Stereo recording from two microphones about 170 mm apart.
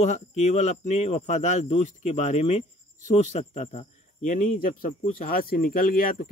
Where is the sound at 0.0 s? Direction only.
40° left (ahead or behind).